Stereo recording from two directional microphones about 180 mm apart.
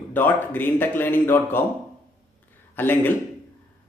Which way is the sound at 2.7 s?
10° left (ahead or behind).